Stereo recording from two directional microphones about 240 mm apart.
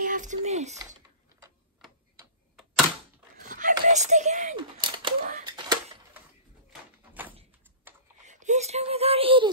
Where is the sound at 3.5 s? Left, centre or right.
Right.